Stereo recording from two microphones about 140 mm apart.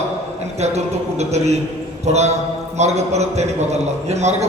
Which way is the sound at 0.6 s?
50° right (ahead or behind).